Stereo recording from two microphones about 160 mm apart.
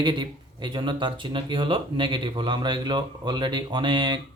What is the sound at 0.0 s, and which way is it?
Speech, 30° right (ahead or behind).